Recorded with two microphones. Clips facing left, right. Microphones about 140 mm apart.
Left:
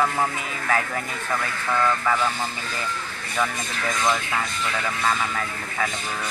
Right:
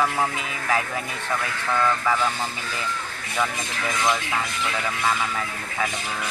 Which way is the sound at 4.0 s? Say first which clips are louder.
Even; 5° right (ahead or behind).